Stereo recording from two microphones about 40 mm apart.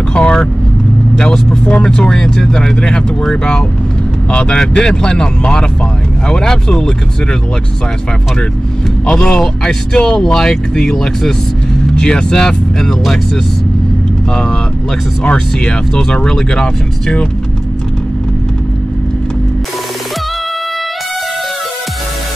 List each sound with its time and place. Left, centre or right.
0.2 s vehicle: left
1.1 s speech: centre
9.0 s speech: left
15.2 s speech: left